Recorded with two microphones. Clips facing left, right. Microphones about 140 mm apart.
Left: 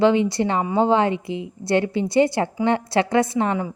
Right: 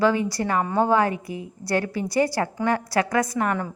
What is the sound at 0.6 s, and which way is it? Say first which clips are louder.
Speech: left 1 dB; 10° left (ahead or behind).